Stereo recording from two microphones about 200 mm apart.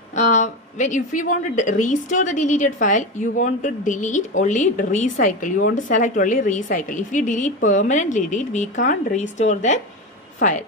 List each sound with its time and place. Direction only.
0.1 s a woman's voice: 35° left (ahead or behind)